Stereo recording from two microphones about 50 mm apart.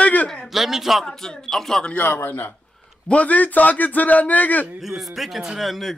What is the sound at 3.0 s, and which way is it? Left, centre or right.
A man's voice, left.